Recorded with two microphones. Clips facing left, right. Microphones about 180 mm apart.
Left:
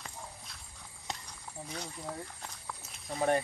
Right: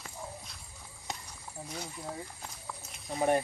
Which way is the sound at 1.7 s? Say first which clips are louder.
Even; 5° right (ahead or behind).